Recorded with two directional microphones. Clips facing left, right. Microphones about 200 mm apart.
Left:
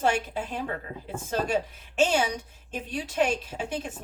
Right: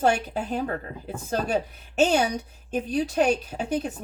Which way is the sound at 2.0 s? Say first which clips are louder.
Right 3 dB; 40° right (ahead or behind).